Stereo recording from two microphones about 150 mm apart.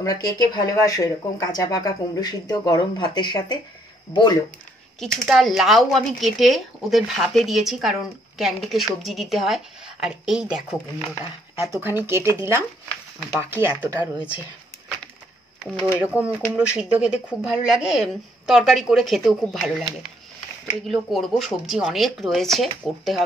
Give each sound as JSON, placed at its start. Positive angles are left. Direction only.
{"t": 0.0, "sound": "speech", "side_deg": 25}
{"t": 5.0, "sound": "speech", "side_deg": 0}
{"t": 11.6, "sound": "speech", "side_deg": -15}
{"t": 16.0, "sound": "speech", "side_deg": -10}